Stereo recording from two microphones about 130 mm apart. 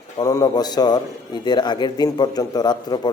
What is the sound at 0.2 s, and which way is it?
A man's voice, 30° left (ahead or behind).